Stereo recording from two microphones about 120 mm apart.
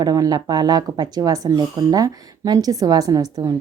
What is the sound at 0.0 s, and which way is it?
A woman's voice, 30° right (ahead or behind).